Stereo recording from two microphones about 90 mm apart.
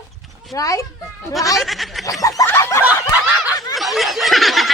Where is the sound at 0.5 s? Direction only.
40° left (ahead or behind).